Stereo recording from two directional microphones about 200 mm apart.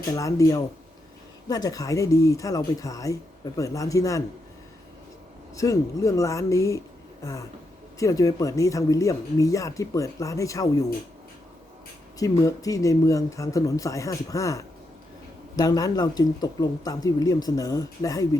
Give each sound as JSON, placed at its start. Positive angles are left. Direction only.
{"t": 0.1, "sound": "speech", "side_deg": 15}
{"t": 5.5, "sound": "speech", "side_deg": 15}
{"t": 12.2, "sound": "speech", "side_deg": 15}